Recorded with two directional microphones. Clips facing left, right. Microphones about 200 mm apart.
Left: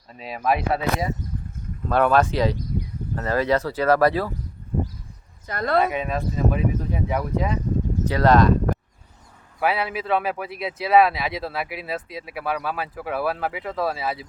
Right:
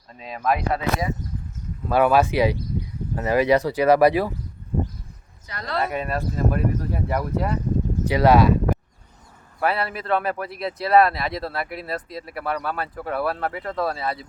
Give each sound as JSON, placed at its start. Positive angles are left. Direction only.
{"t": 0.1, "sound": "speech", "side_deg": 5}
{"t": 0.8, "sound": "speech", "side_deg": 35}
{"t": 1.9, "sound": "speech", "side_deg": -10}
{"t": 5.5, "sound": "speech", "side_deg": 50}
{"t": 5.9, "sound": "speech", "side_deg": -5}
{"t": 9.6, "sound": "speech", "side_deg": 0}